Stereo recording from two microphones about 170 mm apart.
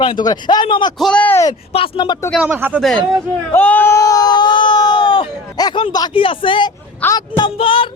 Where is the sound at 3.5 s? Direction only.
10° left (ahead or behind); by 6.7 s 30° left (ahead or behind).